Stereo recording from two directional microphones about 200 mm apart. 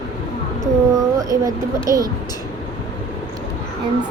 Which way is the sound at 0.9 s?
15° right (ahead or behind).